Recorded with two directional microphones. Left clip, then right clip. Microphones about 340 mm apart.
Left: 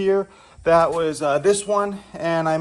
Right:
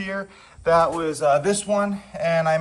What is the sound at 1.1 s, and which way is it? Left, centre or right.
Speech, centre.